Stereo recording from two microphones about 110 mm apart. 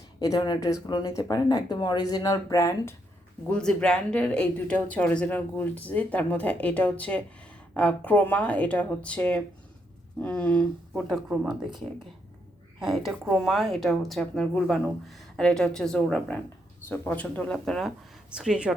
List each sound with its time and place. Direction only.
0.2 s speech: 35° left (ahead or behind)
3.5 s speech: 10° left (ahead or behind)
11.3 s a woman's voice: 5° right (ahead or behind)
12.8 s a woman's voice: centre (ahead or behind)
18.3 s speech: 10° right (ahead or behind)